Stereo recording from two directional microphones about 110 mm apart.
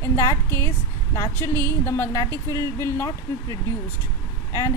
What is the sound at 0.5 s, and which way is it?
A woman's voice, 25° left (ahead or behind).